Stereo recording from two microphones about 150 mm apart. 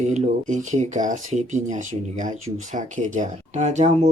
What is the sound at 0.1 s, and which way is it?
Speech, 55° right (ahead or behind).